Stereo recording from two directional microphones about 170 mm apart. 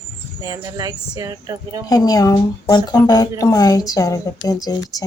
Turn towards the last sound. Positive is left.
turn(degrees=20)  # may be behind; listen again after turning